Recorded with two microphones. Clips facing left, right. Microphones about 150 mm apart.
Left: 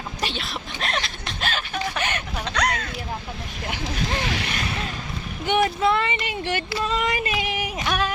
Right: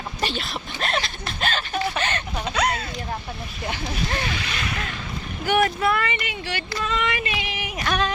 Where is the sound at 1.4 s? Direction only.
Centre (ahead or behind).